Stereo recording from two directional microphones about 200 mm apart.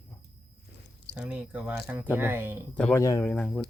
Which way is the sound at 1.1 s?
5° right (ahead or behind).